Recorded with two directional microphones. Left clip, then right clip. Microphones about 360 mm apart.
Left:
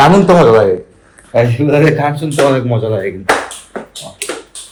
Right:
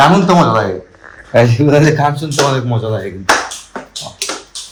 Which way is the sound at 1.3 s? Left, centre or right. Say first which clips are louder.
Right 1 dB; centre.